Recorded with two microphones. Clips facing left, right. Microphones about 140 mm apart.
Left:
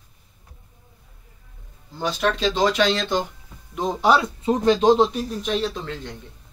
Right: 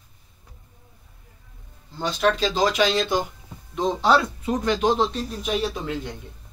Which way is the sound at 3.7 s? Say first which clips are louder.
Left 1 dB; 5° left (ahead or behind).